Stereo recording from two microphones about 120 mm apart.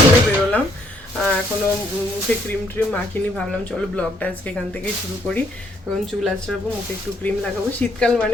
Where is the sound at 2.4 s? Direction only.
10° left (ahead or behind).